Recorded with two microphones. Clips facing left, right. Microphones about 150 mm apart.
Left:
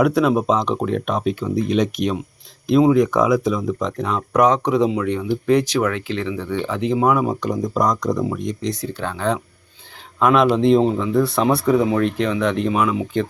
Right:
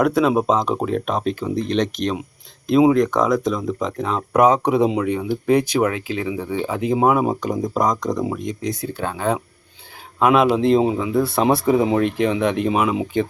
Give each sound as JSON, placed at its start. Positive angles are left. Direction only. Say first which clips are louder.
{"t": 0.0, "sound": "speech", "louder": "even", "side_deg": 0}
{"t": 7.0, "sound": "speech", "louder": "right 1 dB", "side_deg": -25}
{"t": 7.6, "sound": "speech", "louder": "left 1 dB", "side_deg": -5}
{"t": 8.1, "sound": "speech", "louder": "left 1 dB", "side_deg": -15}
{"t": 11.4, "sound": "speech", "louder": "even", "side_deg": -20}
{"t": 12.0, "sound": "speech", "louder": "right 1 dB", "side_deg": -10}